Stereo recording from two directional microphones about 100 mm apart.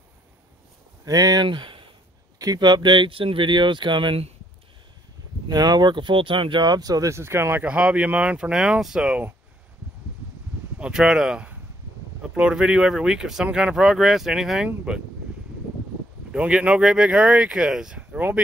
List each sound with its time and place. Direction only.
1.0 s speech: 40° right (ahead or behind); by 1.9 s 55° right (ahead or behind)
2.3 s speech: 40° right (ahead or behind)
5.5 s speech: 40° right (ahead or behind); by 7.6 s 25° right (ahead or behind)
7.6 s speech: 10° right (ahead or behind)
10.8 s speech: 5° right (ahead or behind)
16.3 s speech: 10° right (ahead or behind)